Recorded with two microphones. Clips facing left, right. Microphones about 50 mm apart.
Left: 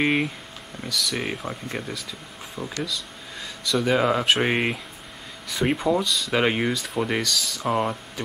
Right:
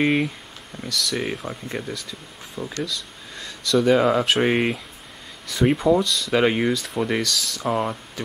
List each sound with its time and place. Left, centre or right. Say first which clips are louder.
0.0 s speech: right 2 dB; centre
5.9 s speech: right 4 dB; centre